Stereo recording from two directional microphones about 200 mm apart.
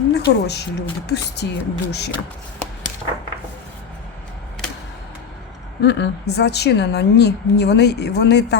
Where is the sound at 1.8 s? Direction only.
55° left (ahead or behind).